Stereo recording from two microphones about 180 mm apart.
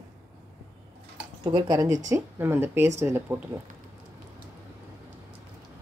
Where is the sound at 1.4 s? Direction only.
20° right (ahead or behind).